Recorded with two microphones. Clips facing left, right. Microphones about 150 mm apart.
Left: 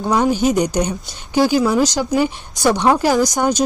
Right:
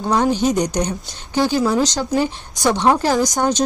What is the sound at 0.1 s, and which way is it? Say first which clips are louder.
A woman's voice: left 1 dB; 10° left (ahead or behind).